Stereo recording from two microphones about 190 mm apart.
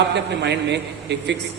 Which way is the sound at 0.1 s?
65° right (ahead or behind).